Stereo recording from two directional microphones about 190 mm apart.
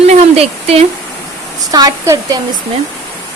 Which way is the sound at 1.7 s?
20° right (ahead or behind).